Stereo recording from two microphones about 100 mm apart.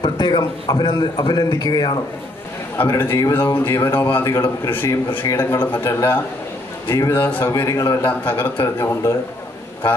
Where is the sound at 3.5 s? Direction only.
25° left (ahead or behind).